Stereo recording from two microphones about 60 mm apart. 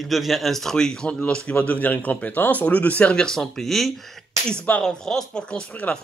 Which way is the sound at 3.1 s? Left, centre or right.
Centre.